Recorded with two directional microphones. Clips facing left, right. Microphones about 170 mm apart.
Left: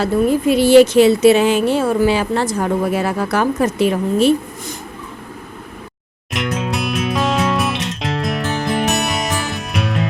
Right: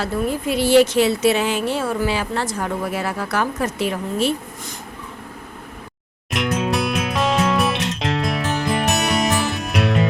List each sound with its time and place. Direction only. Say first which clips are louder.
0.0 s speech: left 7 dB; 20° left (ahead or behind)
6.3 s music: right 1 dB; centre (ahead or behind)